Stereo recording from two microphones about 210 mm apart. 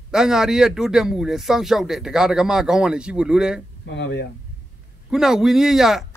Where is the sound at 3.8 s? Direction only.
55° left (ahead or behind).